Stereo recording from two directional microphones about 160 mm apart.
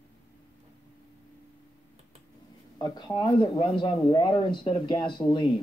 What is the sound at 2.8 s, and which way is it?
Speech, 25° left (ahead or behind).